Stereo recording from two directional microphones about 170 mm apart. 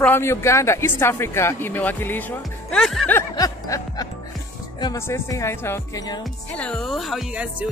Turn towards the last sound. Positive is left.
turn(degrees=-5)  # may be behind; listen again after turning